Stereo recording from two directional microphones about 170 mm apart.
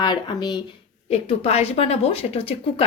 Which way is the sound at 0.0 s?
25° left (ahead or behind).